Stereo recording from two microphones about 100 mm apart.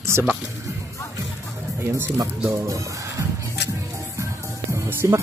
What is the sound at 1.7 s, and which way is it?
Speech, 25° right (ahead or behind).